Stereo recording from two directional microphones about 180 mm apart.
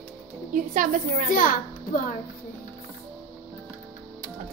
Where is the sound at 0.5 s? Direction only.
45° right (ahead or behind).